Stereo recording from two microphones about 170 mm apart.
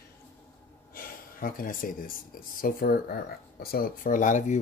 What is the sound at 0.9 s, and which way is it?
Speech, 55° left (ahead or behind).